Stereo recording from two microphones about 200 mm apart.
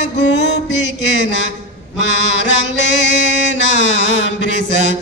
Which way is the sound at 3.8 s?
65° left (ahead or behind).